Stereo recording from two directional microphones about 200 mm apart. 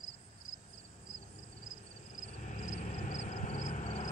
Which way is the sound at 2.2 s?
40° left (ahead or behind).